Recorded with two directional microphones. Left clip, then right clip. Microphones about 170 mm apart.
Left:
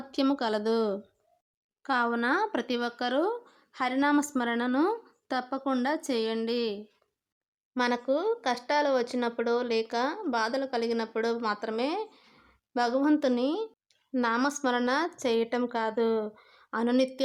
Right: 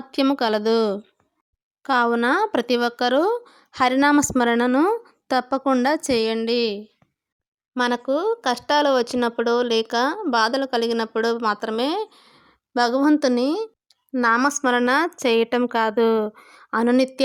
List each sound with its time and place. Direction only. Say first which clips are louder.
0.1 s a woman's voice: right 8 dB; 25° right (ahead or behind)
13.8 s a sound: right 11 dB; 20° right (ahead or behind)
14.6 s a woman's voice: right 8 dB; 25° right (ahead or behind)